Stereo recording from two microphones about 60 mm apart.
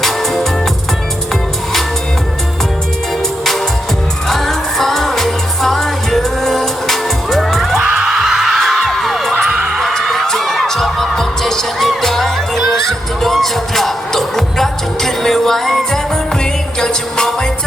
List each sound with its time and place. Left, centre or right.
4.3 s music: centre
7.8 s music: right
8.0 s music: centre
9.5 s heart sounds: centre
9.8 s music: centre